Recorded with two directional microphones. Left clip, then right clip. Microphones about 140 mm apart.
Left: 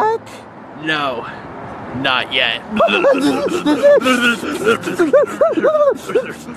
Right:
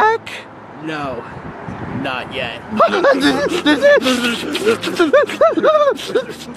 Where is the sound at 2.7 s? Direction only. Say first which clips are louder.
Right 1 dB; 15° right (ahead or behind).